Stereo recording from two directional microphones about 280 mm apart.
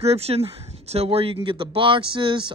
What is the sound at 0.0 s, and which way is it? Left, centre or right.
Speech, right.